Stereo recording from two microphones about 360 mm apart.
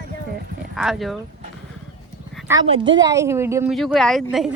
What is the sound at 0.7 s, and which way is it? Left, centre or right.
Speech, centre.